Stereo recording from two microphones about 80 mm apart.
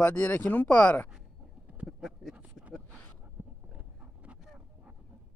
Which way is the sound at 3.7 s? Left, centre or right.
Centre.